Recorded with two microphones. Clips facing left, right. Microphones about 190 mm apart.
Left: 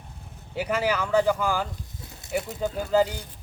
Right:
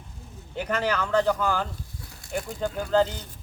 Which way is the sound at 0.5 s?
5° left (ahead or behind).